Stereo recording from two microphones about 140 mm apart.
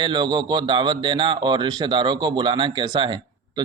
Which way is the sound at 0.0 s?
35° right (ahead or behind).